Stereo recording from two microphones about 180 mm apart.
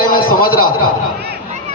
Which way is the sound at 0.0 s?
50° left (ahead or behind).